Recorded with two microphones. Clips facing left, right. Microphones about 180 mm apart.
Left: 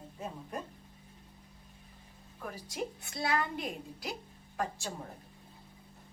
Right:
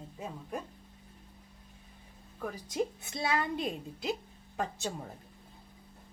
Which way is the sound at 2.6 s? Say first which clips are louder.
Right 6 dB; 20° right (ahead or behind).